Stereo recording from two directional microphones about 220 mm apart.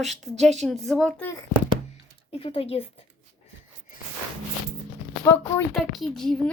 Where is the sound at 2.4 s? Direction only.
25° left (ahead or behind).